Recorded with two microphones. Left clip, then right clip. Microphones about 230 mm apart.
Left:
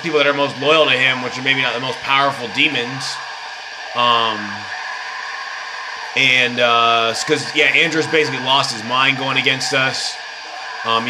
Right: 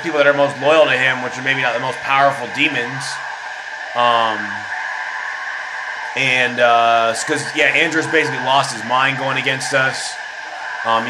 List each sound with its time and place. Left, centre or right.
0.1 s speech: left
3.9 s speech: left
6.1 s speech: left